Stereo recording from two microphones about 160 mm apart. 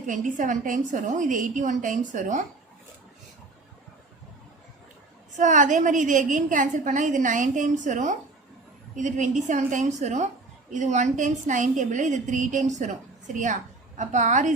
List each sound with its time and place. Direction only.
0.1 s a woman's voice: 55° right (ahead or behind)
5.3 s a woman's voice: 50° right (ahead or behind)